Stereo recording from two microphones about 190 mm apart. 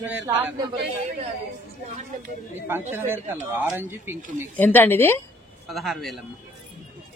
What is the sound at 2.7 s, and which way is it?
Speech, 10° right (ahead or behind).